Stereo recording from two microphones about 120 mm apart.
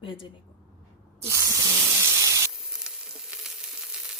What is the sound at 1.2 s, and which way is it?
Spray, 25° right (ahead or behind).